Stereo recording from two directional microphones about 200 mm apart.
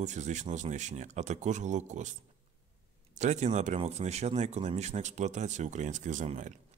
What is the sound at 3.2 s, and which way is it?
A man's voice, 35° right (ahead or behind).